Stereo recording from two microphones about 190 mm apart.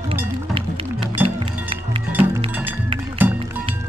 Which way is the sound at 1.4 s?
30° right (ahead or behind).